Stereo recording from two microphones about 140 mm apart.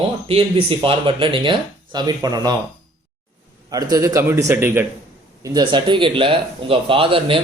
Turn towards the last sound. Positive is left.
turn(degrees=-40)  # may be behind; listen again after turning